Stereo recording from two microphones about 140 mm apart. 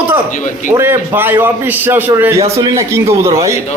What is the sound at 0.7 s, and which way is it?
A man's voice, 15° right (ahead or behind).